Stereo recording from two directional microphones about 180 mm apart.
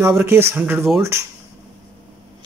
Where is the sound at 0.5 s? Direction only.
10° right (ahead or behind).